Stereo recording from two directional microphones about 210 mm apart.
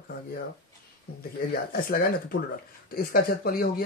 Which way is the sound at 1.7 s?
45° left (ahead or behind).